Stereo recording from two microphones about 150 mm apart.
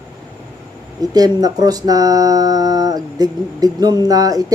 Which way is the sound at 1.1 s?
25° right (ahead or behind).